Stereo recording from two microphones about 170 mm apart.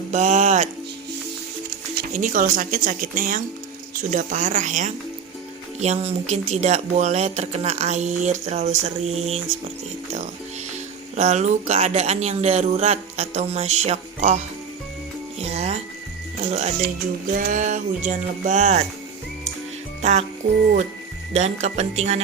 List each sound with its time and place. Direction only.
0.1 s speech: 45° right (ahead or behind)
2.1 s speech: 50° right (ahead or behind)
11.2 s speech: 40° right (ahead or behind)
15.4 s music: 40° right (ahead or behind)
17.3 s speech: 50° right (ahead or behind)
20.0 s music: 40° right (ahead or behind)
20.4 s speech: 45° right (ahead or behind)